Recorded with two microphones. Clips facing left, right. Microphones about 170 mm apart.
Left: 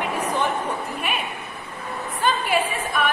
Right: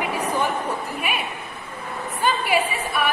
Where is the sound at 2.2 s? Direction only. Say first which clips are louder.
Right 1 dB; 5° right (ahead or behind).